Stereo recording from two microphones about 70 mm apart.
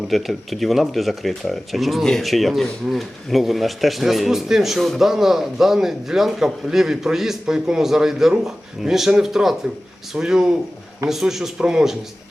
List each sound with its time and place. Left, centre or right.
0.1 s a man's voice: centre